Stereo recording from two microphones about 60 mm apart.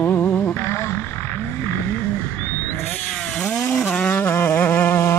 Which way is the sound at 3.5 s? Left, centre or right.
Left.